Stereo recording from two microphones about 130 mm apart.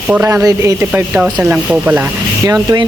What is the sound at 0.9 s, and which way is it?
Speech, 10° right (ahead or behind).